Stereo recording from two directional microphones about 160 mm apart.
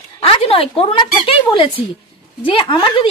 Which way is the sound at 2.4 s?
30° left (ahead or behind).